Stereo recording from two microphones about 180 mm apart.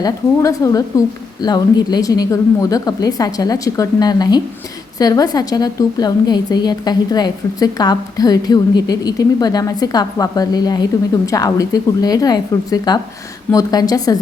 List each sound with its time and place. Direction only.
0.0 s a woman's voice: 20° left (ahead or behind)